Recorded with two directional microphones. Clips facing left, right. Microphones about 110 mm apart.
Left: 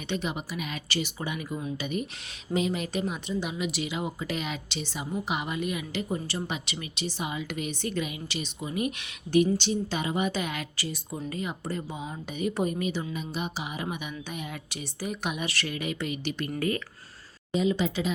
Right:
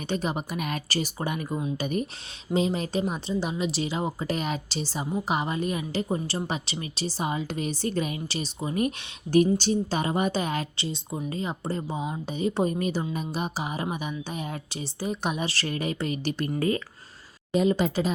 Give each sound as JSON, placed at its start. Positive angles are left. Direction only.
{"t": 0.1, "sound": "a woman's voice", "side_deg": -40}
{"t": 2.5, "sound": "speech", "side_deg": -30}
{"t": 17.5, "sound": "a woman's voice", "side_deg": -50}